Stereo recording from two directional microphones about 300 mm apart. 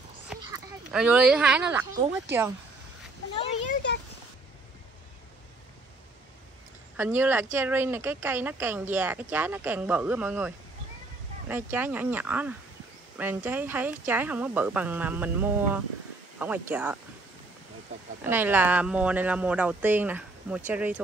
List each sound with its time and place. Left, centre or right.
0.3 s speech: centre
7.0 s speech: centre
18.2 s speech: centre